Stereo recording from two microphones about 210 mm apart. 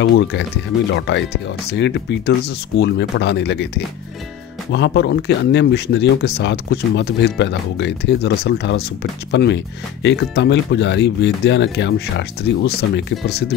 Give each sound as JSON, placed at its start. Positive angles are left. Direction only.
{"t": 0.0, "sound": "speech", "side_deg": 60}